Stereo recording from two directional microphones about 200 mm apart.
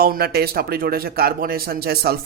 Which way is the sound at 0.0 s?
50° right (ahead or behind).